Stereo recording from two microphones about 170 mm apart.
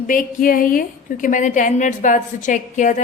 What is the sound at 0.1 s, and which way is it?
A woman's voice, 50° left (ahead or behind).